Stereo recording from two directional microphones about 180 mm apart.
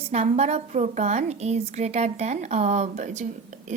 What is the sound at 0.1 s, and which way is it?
A woman's voice, 35° right (ahead or behind).